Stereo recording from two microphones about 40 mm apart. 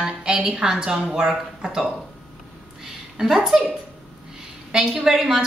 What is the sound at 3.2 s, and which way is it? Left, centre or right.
Speech, right.